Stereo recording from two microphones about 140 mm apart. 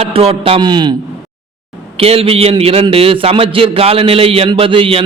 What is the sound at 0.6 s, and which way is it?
Speech, 30° right (ahead or behind).